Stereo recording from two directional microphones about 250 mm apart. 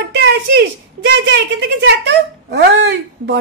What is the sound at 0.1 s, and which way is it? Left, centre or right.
A woman's voice, right.